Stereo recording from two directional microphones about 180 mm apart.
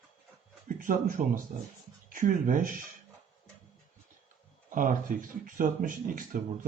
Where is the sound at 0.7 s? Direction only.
50° right (ahead or behind).